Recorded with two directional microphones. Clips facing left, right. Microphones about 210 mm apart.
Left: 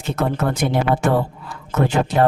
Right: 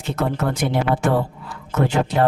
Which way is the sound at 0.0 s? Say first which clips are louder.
Left 1 dB; 45° left (ahead or behind).